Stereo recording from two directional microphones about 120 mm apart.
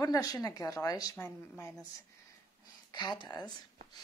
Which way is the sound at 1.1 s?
15° left (ahead or behind).